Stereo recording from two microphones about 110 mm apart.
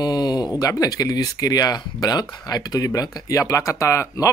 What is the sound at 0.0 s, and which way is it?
Speech, 40° left (ahead or behind).